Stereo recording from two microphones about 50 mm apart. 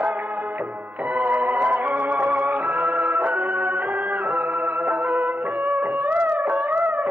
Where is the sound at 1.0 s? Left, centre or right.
Right.